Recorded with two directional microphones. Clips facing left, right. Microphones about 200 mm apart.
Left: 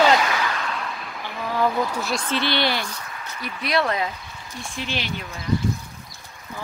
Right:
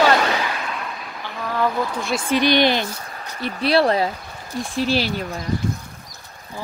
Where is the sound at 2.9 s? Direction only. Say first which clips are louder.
Right 2 dB; 35° right (ahead or behind).